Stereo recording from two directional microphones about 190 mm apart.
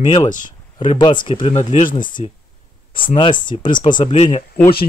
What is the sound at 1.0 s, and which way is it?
Speech, 25° left (ahead or behind).